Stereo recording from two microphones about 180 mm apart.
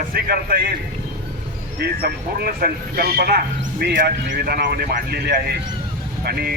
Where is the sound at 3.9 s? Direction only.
55° right (ahead or behind).